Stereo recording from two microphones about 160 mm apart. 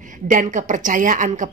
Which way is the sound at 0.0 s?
55° right (ahead or behind).